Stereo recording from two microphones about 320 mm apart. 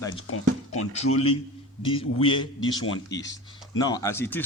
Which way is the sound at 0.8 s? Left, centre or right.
Centre.